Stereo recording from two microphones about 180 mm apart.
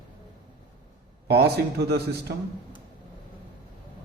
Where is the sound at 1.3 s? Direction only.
65° right (ahead or behind).